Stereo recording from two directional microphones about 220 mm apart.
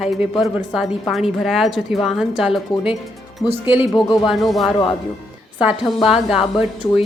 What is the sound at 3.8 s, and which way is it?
Speech, 20° left (ahead or behind).